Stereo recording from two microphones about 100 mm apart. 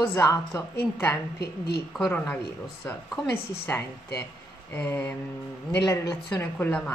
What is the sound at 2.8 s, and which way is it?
A woman's voice, 25° left (ahead or behind).